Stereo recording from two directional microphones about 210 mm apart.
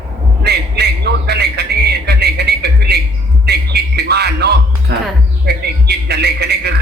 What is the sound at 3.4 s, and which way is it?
Music, 50° right (ahead or behind).